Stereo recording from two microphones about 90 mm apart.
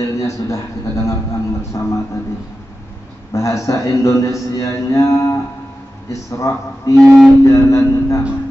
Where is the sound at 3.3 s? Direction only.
35° left (ahead or behind).